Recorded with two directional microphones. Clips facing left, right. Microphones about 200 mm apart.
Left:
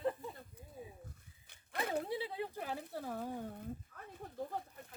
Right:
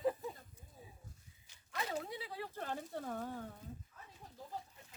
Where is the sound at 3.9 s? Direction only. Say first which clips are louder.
Left 10 dB; 60° left (ahead or behind).